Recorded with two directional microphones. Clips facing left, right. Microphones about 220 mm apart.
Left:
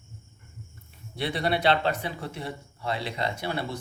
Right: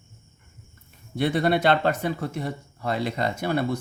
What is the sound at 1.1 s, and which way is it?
A man's voice, 50° right (ahead or behind).